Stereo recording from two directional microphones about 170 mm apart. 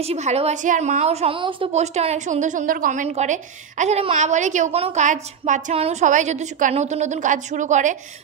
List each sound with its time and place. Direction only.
0.0 s a woman's voice: 40° right (ahead or behind)